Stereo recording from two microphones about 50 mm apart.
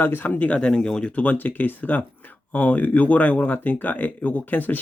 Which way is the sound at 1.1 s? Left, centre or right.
Left.